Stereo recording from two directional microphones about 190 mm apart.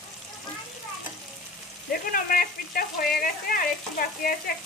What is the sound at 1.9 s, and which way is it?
Speech, 50° left (ahead or behind).